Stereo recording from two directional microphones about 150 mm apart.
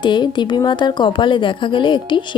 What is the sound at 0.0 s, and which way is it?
Speech, 30° left (ahead or behind).